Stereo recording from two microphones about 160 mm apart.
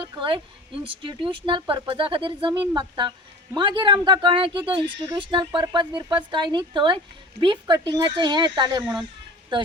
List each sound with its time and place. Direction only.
0.0 s speech: 30° right (ahead or behind)